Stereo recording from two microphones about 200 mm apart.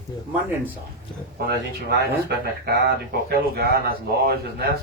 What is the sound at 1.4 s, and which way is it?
Speech, 50° right (ahead or behind).